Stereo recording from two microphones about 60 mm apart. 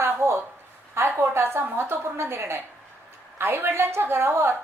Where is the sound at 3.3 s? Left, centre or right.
Right.